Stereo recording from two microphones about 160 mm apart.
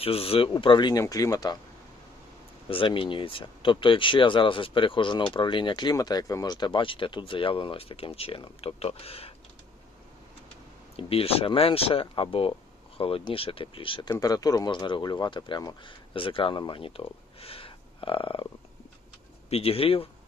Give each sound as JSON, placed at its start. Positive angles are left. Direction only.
{"t": 0.0, "sound": "speech", "side_deg": 35}
{"t": 2.6, "sound": "speech", "side_deg": 35}
{"t": 10.9, "sound": "speech", "side_deg": 35}
{"t": 19.5, "sound": "speech", "side_deg": 35}